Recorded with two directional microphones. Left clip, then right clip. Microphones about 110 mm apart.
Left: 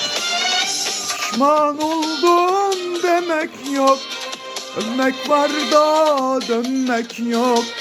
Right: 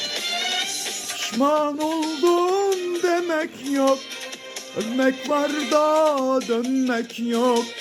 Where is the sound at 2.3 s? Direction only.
5° right (ahead or behind).